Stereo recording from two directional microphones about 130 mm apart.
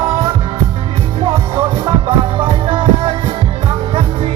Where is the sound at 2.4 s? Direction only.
40° right (ahead or behind).